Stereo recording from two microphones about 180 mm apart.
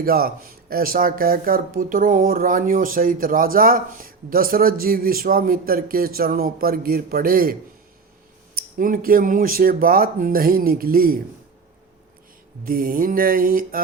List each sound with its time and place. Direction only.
0.0 s speech: 55° right (ahead or behind)
8.5 s speech: 50° right (ahead or behind)
12.6 s speech: 55° right (ahead or behind)